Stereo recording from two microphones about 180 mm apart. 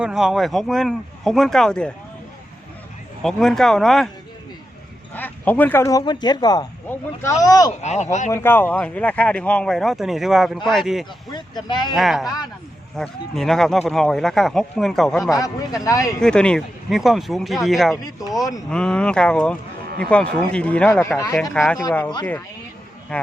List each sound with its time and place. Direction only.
0.0 s speech: 5° right (ahead or behind)
3.2 s speech: centre (ahead or behind)
5.1 s speech: 10° left (ahead or behind)
7.7 s speech: 40° left (ahead or behind)
8.3 s speech: 10° left (ahead or behind)
11.3 s speech: 25° left (ahead or behind)
11.9 s speech: centre (ahead or behind)
15.2 s speech: 20° left (ahead or behind)
16.2 s speech: 5° left (ahead or behind)
20.9 s speech: 15° left (ahead or behind)
21.5 s speech: 5° left (ahead or behind)
23.1 s speech: 5° left (ahead or behind)